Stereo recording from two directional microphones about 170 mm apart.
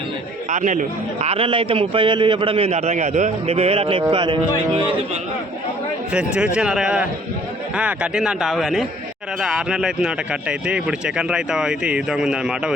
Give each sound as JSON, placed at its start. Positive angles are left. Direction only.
{"t": 0.5, "sound": "a man's voice", "side_deg": -45}
{"t": 6.1, "sound": "speech", "side_deg": -5}